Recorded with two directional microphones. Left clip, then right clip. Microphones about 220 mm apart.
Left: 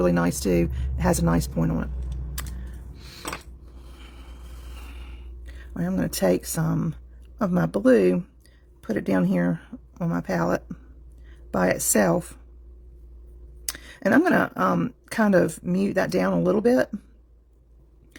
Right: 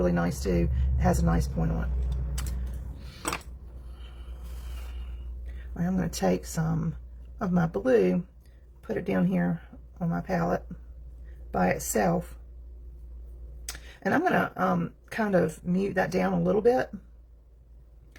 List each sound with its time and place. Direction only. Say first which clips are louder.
0.0 s speech: left 5 dB; 50° left (ahead or behind)
5.7 s speech: left 4 dB; 45° left (ahead or behind)
13.7 s speech: left 6 dB; 50° left (ahead or behind)